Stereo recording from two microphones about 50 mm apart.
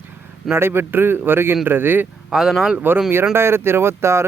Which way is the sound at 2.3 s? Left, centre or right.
Centre.